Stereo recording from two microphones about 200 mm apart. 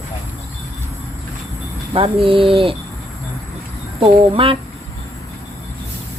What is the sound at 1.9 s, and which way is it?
Speech, 25° right (ahead or behind).